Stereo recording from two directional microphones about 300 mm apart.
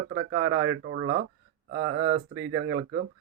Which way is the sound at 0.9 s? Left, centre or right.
Right.